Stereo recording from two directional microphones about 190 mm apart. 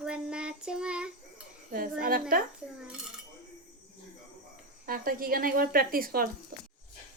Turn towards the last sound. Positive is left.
turn(degrees=-50)  # may be behind; listen again after turning